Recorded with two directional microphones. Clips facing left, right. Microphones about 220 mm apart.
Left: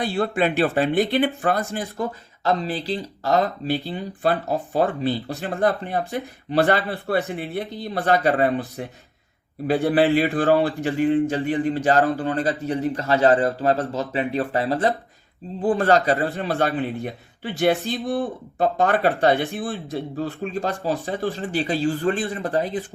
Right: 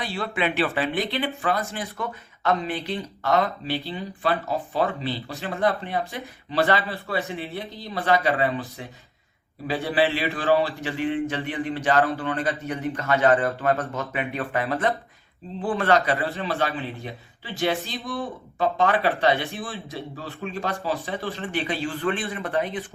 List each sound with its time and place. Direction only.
0.1 s a man's voice: 45° left (ahead or behind)
18.6 s speech: 45° left (ahead or behind)